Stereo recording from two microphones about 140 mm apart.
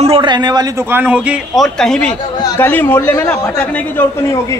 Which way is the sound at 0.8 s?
15° right (ahead or behind).